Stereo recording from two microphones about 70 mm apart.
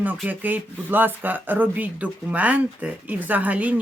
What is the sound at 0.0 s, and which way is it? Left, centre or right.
Speech, right.